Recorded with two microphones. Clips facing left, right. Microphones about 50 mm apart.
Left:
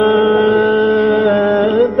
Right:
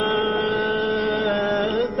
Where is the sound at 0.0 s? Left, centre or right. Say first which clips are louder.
Left 11 dB; left.